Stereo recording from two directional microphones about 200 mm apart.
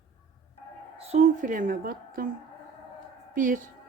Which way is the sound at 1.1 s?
35° right (ahead or behind).